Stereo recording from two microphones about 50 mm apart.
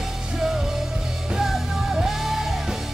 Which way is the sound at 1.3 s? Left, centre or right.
Centre.